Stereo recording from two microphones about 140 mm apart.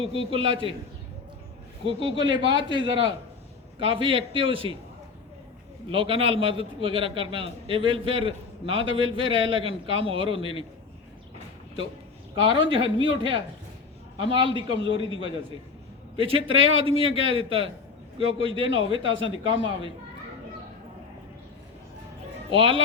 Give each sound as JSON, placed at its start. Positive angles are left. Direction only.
{"t": 0.0, "sound": "a man's voice", "side_deg": -40}
{"t": 1.9, "sound": "a man's voice", "side_deg": -40}
{"t": 5.9, "sound": "a man's voice", "side_deg": -40}
{"t": 12.3, "sound": "a man's voice", "side_deg": -35}
{"t": 22.5, "sound": "a man's voice", "side_deg": -40}